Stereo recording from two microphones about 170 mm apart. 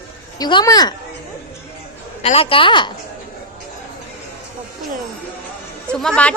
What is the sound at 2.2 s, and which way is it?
Speech, 35° left (ahead or behind).